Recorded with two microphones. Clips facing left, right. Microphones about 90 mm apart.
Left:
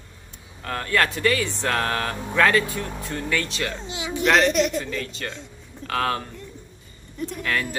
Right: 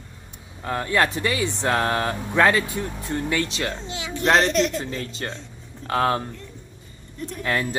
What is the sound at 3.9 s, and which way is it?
Speech, 20° left (ahead or behind).